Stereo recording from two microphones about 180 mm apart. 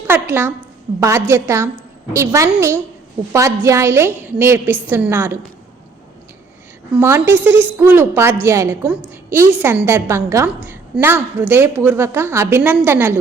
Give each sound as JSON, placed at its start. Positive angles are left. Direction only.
{"t": 0.1, "sound": "a woman's voice", "side_deg": -10}
{"t": 7.0, "sound": "a woman's voice", "side_deg": -15}